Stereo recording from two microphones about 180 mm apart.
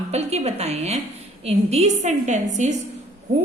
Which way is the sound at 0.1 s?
35° right (ahead or behind).